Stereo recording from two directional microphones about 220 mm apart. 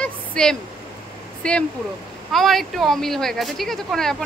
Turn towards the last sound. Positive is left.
turn(degrees=0)  # may be behind; listen again after turning